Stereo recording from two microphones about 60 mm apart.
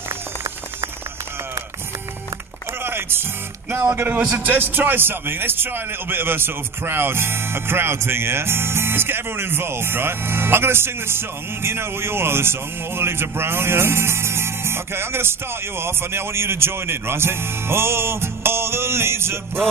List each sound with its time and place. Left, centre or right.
2.8 s music: right
3.9 s a man's voice: right